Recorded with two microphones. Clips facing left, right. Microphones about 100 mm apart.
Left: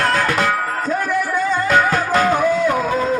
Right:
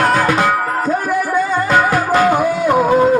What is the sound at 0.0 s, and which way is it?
Music, 20° right (ahead or behind).